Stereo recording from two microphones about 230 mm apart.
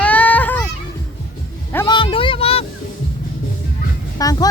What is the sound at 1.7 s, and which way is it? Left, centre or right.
Speech, centre.